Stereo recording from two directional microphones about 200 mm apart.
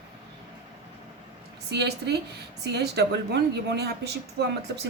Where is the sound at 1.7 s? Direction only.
55° right (ahead or behind).